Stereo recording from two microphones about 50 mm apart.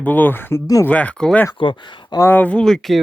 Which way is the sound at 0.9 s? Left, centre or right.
Left.